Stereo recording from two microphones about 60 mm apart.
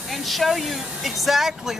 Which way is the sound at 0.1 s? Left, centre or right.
Centre.